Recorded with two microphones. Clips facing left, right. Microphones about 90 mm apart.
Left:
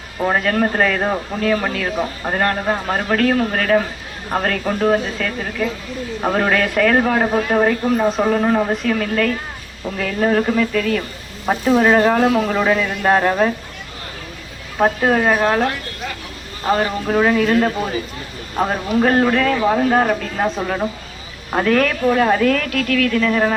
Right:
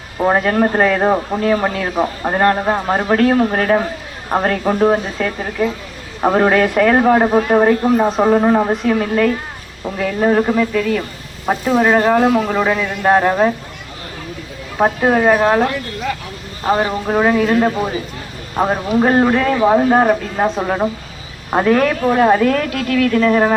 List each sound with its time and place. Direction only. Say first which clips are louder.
0.2 s speech: right 3 dB; 20° right (ahead or behind)
14.8 s speech: right 2 dB; 10° right (ahead or behind)
16.6 s speech: right 2 dB; 15° right (ahead or behind)